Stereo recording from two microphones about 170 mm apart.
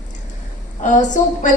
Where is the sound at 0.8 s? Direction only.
45° left (ahead or behind).